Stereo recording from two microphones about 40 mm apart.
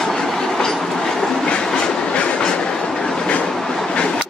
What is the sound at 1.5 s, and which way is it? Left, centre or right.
Train, left.